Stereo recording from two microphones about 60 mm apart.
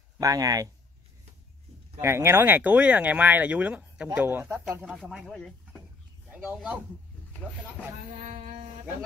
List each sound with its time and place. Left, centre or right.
0.2 s speech: right
2.0 s speech: right
6.3 s speech: right
7.4 s speech: centre